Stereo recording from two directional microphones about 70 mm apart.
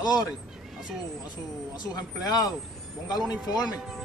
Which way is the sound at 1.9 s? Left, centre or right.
Left.